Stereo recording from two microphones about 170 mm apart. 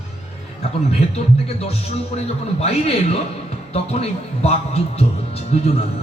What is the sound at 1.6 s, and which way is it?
A man's voice, 35° left (ahead or behind).